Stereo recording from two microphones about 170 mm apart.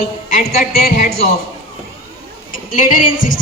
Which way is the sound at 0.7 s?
60° left (ahead or behind).